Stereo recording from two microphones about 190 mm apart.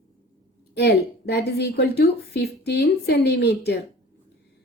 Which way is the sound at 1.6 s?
60° left (ahead or behind).